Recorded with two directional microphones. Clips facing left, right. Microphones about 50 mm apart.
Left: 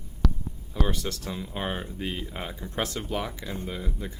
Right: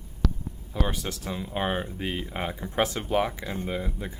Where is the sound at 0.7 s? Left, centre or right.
Centre.